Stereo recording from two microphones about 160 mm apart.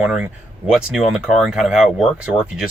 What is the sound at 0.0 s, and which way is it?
Speech, 5° right (ahead or behind).